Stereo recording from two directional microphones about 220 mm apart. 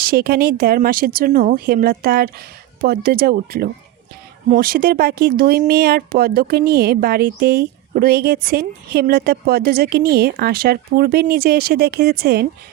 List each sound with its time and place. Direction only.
0.0 s speech: 45° right (ahead or behind)